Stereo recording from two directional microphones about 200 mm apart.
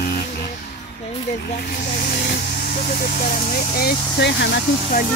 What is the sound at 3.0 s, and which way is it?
Speech, 40° left (ahead or behind).